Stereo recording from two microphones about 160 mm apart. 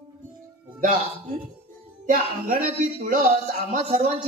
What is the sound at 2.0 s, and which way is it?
A man's voice, 55° right (ahead or behind).